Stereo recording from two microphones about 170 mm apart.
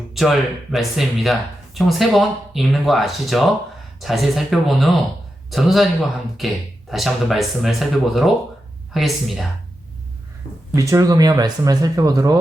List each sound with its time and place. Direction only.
0.1 s speech: centre (ahead or behind)
10.8 s speech: 20° right (ahead or behind)